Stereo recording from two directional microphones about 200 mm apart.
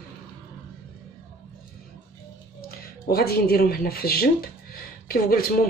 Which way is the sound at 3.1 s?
50° left (ahead or behind).